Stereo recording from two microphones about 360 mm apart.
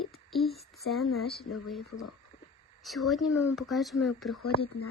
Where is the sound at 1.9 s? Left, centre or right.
Left.